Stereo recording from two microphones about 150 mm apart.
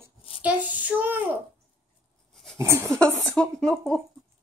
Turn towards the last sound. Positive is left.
turn(degrees=5)  # may be behind; listen again after turning